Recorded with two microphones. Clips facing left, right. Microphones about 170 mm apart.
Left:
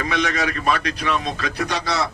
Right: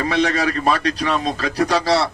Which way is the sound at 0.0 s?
35° right (ahead or behind).